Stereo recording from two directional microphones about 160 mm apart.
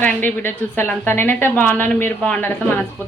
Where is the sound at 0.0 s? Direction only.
10° left (ahead or behind).